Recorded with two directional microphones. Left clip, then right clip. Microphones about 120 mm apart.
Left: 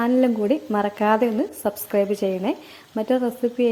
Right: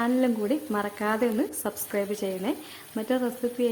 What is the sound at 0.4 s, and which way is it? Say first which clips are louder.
Speech: left 6 dB; 30° left (ahead or behind).